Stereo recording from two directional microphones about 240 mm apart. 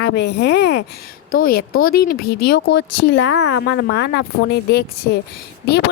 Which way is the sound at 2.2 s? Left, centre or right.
Left.